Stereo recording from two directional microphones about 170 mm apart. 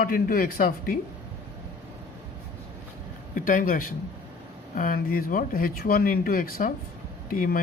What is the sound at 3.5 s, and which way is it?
Speech, 55° left (ahead or behind).